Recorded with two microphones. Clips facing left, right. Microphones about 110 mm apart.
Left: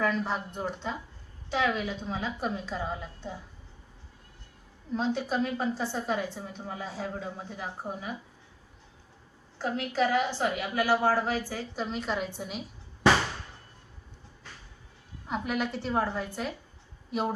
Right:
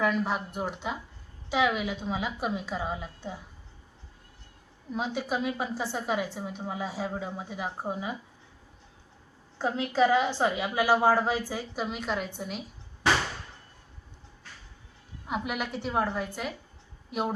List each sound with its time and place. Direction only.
0.0 s a woman's voice: 5° right (ahead or behind)
4.9 s a woman's voice: 10° right (ahead or behind)
9.6 s a woman's voice: 25° right (ahead or behind); by 12.6 s centre (ahead or behind)
15.3 s a woman's voice: 5° right (ahead or behind)